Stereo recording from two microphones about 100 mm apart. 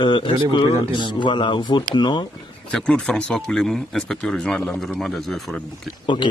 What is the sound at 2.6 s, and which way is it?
A man's voice, 10° left (ahead or behind).